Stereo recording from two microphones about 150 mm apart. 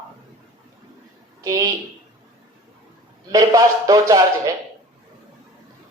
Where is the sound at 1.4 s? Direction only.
25° right (ahead or behind).